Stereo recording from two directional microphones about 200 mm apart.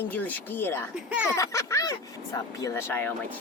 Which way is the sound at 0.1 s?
10° left (ahead or behind).